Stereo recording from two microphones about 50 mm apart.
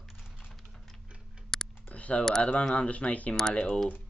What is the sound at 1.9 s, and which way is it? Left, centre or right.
Typing, left.